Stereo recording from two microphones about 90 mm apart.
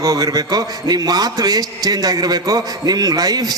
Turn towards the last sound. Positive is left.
turn(degrees=-45)  # may be behind; listen again after turning